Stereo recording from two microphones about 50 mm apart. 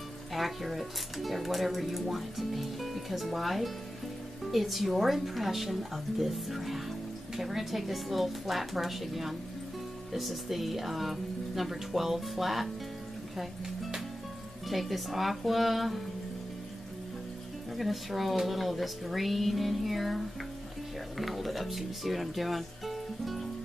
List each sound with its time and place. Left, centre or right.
0.3 s speech: centre
14.7 s speech: centre
17.7 s speech: centre